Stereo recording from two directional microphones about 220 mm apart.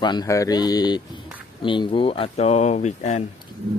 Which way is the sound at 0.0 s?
20° left (ahead or behind).